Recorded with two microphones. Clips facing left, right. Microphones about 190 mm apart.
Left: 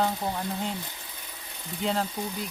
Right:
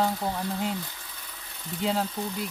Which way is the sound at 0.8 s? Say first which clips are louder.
Left 1 dB; 20° left (ahead or behind).